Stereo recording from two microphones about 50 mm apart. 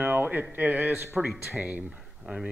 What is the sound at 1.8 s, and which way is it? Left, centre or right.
Speech, centre.